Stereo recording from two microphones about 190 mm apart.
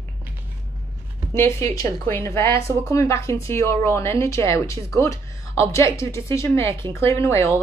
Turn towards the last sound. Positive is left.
turn(degrees=15)  # may be behind; listen again after turning